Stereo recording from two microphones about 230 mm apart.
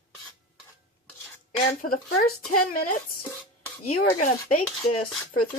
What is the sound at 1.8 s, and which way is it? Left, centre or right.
Speech, left.